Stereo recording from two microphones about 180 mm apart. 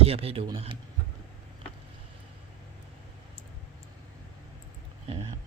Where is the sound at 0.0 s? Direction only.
35° right (ahead or behind).